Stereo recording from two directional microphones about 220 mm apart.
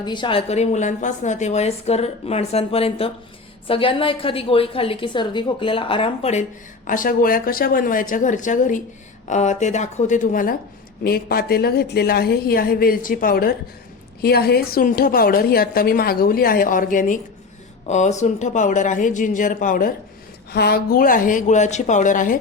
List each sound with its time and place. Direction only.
0.0 s a woman's voice: 20° left (ahead or behind)
6.8 s a woman's voice: 40° left (ahead or behind)